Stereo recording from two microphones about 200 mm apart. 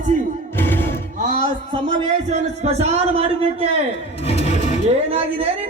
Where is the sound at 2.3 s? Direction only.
35° right (ahead or behind).